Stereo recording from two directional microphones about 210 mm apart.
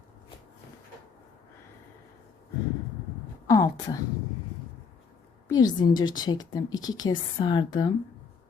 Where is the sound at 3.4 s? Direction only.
15° left (ahead or behind).